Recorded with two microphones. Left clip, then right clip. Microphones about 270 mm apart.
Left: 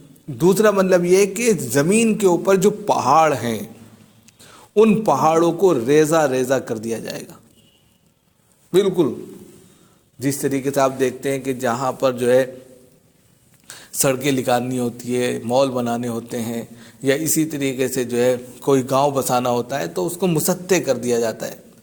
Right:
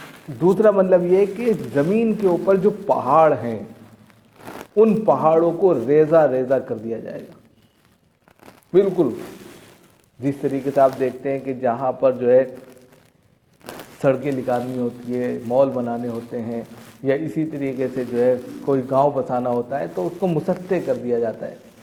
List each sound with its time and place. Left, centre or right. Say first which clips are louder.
0.3 s a man's voice: even; left
4.7 s a man's voice: even; left
8.7 s a man's voice: even; left
10.2 s a man's voice: left 1 dB; left
14.0 s a man's voice: left 1 dB; left